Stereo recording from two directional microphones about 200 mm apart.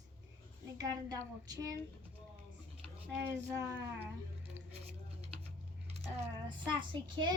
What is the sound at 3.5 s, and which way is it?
Speech, 15° right (ahead or behind).